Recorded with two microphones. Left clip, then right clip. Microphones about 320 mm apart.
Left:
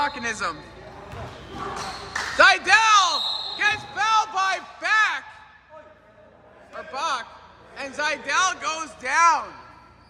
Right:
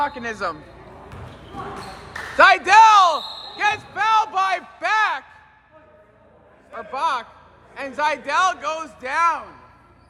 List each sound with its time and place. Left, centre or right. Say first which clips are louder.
0.0 s a man's voice: right 1 dB; centre
2.4 s basketball bounce: right 5 dB; centre
6.7 s a man's voice: right 4 dB; right; by 9.4 s centre